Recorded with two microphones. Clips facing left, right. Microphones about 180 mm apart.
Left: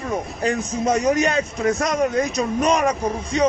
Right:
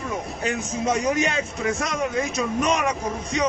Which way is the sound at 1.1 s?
40° left (ahead or behind).